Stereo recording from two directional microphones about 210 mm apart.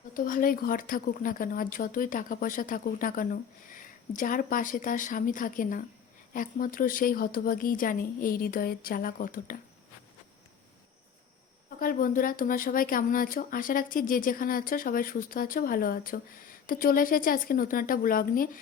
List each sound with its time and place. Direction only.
0.1 s a woman's voice: 40° left (ahead or behind)
11.8 s speech: 40° left (ahead or behind)